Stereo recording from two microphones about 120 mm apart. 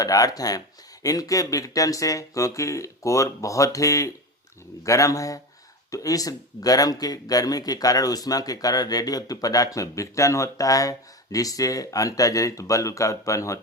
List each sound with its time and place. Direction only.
0.0 s a man's voice: 30° left (ahead or behind)